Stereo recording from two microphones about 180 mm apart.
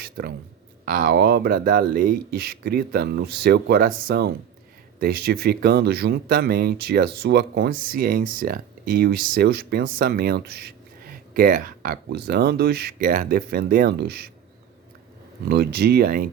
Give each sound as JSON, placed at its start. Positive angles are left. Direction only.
{"t": 0.0, "sound": "a sound", "side_deg": -60}
{"t": 0.9, "sound": "speech", "side_deg": -55}
{"t": 15.4, "sound": "speech", "side_deg": -60}